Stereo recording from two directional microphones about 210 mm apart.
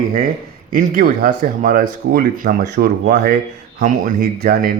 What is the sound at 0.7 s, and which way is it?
Speech, 40° right (ahead or behind).